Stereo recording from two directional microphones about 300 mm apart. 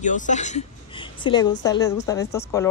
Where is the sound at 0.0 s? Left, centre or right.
Left.